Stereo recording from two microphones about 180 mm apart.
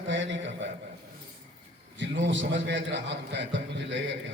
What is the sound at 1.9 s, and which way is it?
A man's voice, 90° right.